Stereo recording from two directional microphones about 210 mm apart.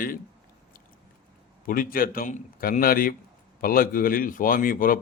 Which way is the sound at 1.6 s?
40° left (ahead or behind).